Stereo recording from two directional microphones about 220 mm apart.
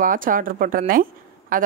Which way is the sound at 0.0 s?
40° right (ahead or behind).